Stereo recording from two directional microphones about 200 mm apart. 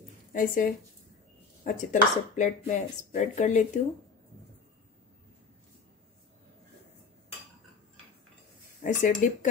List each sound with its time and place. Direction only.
0.3 s a woman's voice: 45° left (ahead or behind)
8.8 s speech: 40° left (ahead or behind)